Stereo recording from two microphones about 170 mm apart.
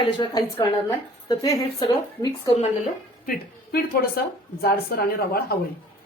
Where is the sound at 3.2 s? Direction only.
60° left (ahead or behind).